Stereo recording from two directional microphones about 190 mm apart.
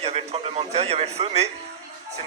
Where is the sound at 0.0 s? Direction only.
30° right (ahead or behind).